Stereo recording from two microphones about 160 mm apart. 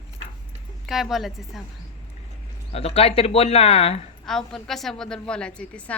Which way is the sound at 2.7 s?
40° left (ahead or behind).